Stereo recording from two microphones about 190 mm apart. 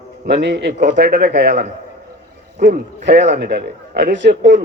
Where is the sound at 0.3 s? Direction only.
65° right (ahead or behind).